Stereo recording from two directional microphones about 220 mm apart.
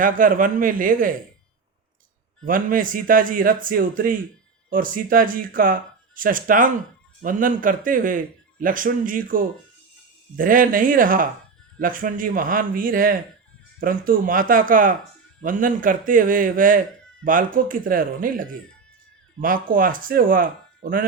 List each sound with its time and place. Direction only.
0.0 s speech: 40° right (ahead or behind)
2.4 s speech: 40° right (ahead or behind)